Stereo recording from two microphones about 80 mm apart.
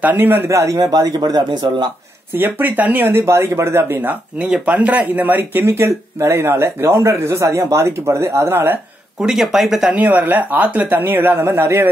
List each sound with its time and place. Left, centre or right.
0.0 s speech: right
0.5 s speech: right
2.3 s speech: right
9.2 s speech: centre
9.9 s speech: right